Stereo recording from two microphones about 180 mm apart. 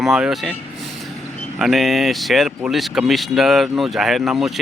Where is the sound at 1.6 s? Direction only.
Centre (ahead or behind).